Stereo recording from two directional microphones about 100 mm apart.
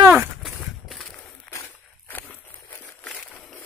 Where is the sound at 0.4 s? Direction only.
Centre (ahead or behind).